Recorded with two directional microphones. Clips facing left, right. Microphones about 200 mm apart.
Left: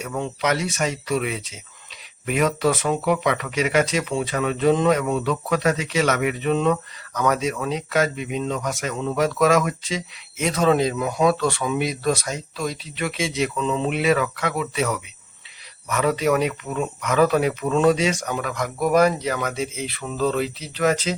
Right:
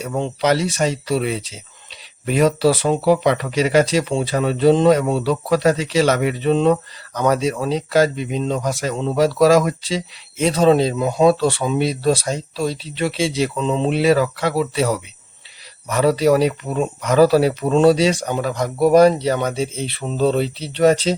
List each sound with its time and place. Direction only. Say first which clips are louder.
0.0 s speech: right 5 dB; 30° right (ahead or behind)